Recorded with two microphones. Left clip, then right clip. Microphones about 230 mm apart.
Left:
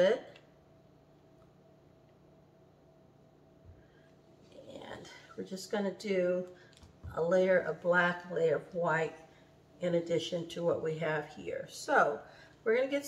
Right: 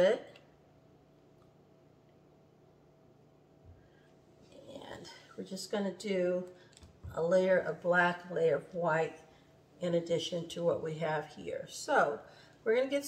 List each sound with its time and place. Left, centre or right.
0.0 s speech: centre
4.7 s a sound: centre
7.1 s speech: centre